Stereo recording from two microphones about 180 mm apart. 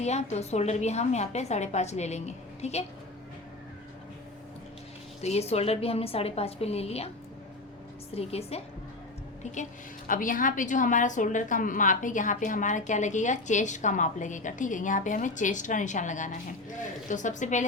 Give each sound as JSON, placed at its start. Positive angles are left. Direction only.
{"t": 0.0, "sound": "a woman's voice", "side_deg": 40}
{"t": 5.2, "sound": "a woman's voice", "side_deg": 35}
{"t": 8.1, "sound": "a woman's voice", "side_deg": 35}
{"t": 10.1, "sound": "a woman's voice", "side_deg": 50}